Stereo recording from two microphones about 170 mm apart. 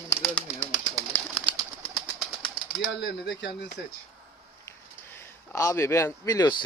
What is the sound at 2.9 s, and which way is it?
Speech, 90° left.